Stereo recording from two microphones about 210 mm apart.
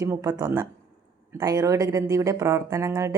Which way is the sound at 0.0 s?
15° right (ahead or behind).